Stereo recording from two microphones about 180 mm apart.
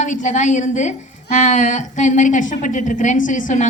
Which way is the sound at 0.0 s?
40° left (ahead or behind).